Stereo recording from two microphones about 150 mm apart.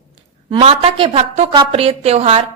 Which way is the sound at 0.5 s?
40° right (ahead or behind).